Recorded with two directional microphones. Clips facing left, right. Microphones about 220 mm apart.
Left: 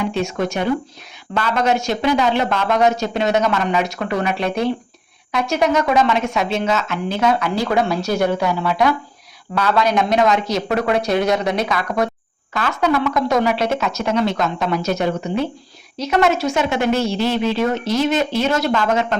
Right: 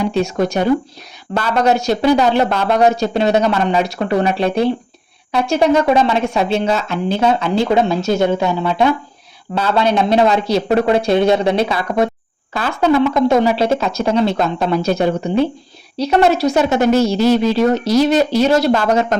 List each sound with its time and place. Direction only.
0.0 s speech: 35° right (ahead or behind)